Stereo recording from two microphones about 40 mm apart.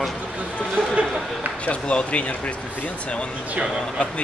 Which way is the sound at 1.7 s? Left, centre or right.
Left.